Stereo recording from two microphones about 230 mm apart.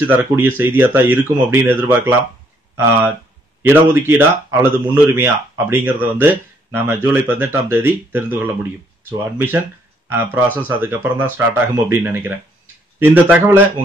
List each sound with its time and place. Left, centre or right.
0.0 s speech: centre
3.6 s speech: centre